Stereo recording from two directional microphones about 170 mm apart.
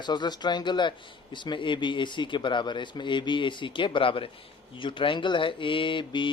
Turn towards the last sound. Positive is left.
turn(degrees=30)  # may be behind; listen again after turning